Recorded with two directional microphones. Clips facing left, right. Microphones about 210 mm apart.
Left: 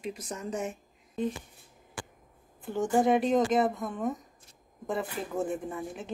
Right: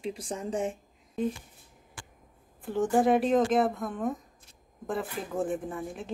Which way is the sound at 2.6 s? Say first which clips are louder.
Right 1 dB; centre (ahead or behind).